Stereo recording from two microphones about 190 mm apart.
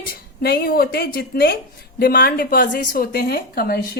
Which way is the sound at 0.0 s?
55° left (ahead or behind).